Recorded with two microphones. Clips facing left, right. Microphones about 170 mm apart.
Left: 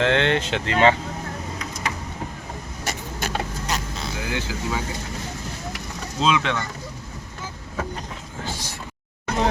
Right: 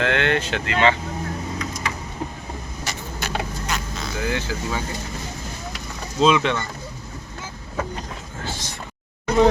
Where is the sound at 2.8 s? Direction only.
45° left (ahead or behind).